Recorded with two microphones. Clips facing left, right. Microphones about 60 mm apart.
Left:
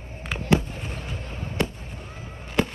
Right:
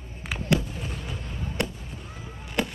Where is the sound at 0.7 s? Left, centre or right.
Centre.